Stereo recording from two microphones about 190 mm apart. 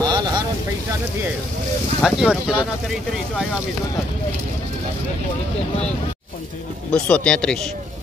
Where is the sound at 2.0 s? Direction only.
5° right (ahead or behind).